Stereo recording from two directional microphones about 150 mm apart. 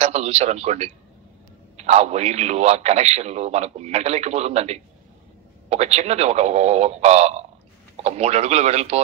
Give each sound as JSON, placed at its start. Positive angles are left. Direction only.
{"t": 0.0, "sound": "a man's voice", "side_deg": -45}